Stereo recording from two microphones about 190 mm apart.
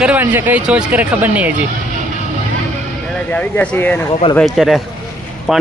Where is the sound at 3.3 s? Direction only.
5° left (ahead or behind).